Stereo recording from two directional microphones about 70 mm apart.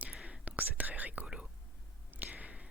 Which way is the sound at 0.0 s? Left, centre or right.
Centre.